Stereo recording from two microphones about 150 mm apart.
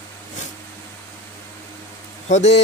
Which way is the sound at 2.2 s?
50° left (ahead or behind).